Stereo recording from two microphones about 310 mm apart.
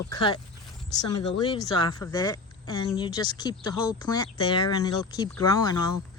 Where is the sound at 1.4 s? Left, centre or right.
Centre.